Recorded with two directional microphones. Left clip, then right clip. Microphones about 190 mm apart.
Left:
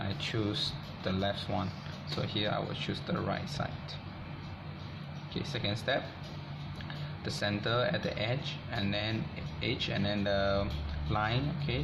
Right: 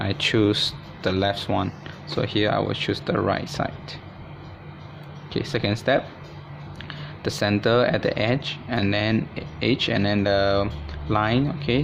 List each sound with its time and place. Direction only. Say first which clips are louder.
0.0 s speech: right 14 dB; 50° right (ahead or behind)
5.3 s speech: right 11 dB; 50° right (ahead or behind)
7.3 s speech: right 12 dB; 50° right (ahead or behind)